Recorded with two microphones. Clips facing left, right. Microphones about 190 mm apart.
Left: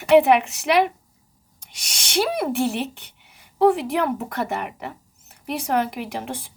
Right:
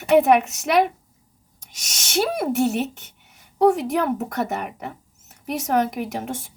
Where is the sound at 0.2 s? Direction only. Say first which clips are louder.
Even; 45° right (ahead or behind).